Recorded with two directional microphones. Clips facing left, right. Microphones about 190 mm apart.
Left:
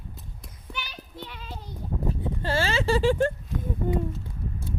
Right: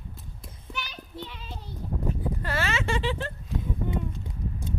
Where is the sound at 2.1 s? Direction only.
30° left (ahead or behind); by 3.3 s 45° left (ahead or behind).